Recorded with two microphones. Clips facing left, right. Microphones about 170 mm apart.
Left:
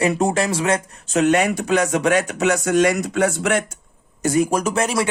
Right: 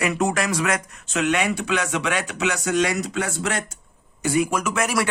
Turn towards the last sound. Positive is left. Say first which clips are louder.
# left 3 dB
turn(degrees=25)  # may be behind; listen again after turning